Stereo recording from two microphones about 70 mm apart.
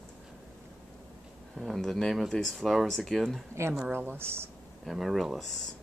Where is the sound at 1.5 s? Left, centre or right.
Centre.